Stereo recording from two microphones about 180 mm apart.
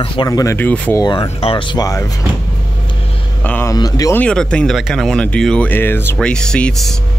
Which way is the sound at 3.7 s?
20° left (ahead or behind).